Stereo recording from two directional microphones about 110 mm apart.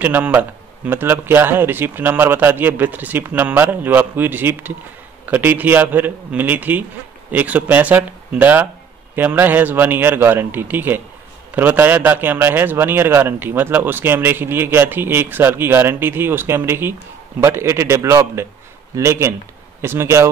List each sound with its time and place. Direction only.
0.0 s a man's voice: 15° right (ahead or behind)